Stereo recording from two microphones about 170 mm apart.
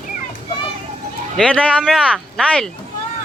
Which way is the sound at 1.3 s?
5° left (ahead or behind).